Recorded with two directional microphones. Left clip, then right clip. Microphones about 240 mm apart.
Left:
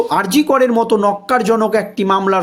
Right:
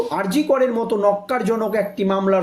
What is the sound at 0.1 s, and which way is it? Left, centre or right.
Speech, left.